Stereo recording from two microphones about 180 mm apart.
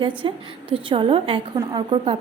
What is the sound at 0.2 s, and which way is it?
A woman's voice, 30° right (ahead or behind).